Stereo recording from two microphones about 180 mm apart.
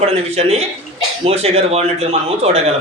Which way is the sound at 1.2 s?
35° right (ahead or behind).